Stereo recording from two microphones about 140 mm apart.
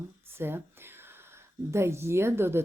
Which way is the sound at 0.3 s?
15° right (ahead or behind).